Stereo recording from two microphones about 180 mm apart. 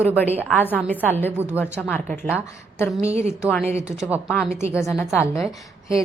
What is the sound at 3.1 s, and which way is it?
Speech, 35° right (ahead or behind).